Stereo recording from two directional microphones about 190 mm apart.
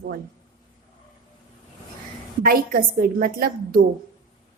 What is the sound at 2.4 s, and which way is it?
A woman's voice, 50° right (ahead or behind).